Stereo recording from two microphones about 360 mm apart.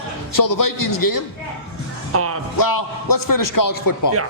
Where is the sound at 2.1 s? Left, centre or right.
Right.